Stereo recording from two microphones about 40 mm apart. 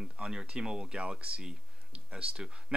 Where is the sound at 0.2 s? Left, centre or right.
Centre.